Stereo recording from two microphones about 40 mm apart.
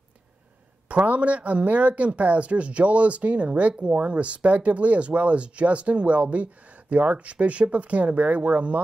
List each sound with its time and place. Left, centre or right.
0.8 s speech: right